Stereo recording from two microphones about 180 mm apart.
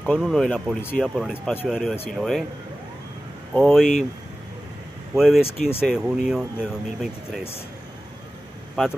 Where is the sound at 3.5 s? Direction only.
Centre (ahead or behind).